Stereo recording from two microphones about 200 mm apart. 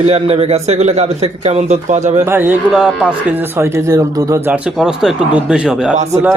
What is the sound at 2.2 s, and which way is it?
Speech, 10° right (ahead or behind).